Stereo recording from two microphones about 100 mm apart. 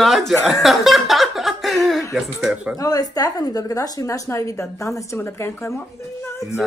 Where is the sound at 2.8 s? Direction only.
40° left (ahead or behind).